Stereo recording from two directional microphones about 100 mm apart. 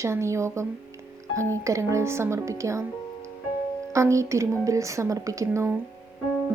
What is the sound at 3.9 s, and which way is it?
Speech, 30° right (ahead or behind).